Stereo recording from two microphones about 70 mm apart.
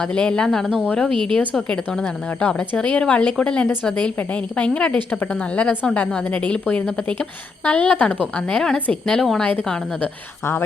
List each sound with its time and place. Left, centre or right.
0.0 s a woman's voice: centre